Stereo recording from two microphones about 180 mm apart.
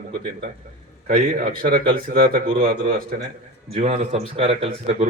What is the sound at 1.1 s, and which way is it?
A man's voice, 50° right (ahead or behind).